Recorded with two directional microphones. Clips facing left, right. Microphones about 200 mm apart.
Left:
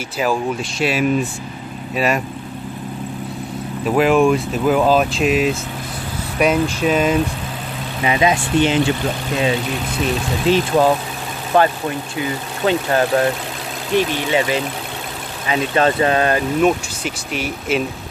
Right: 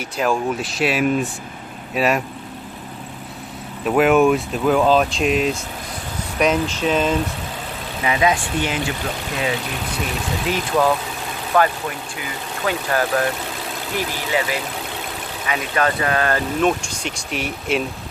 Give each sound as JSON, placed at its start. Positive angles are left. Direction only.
{"t": 0.2, "sound": "speech", "side_deg": 0}
{"t": 3.8, "sound": "speech", "side_deg": 0}
{"t": 8.0, "sound": "speech", "side_deg": 20}
{"t": 10.5, "sound": "speech", "side_deg": 30}
{"t": 16.6, "sound": "speech", "side_deg": 0}